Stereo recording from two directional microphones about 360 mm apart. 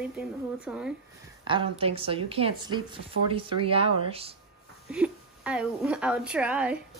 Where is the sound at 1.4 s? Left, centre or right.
Centre.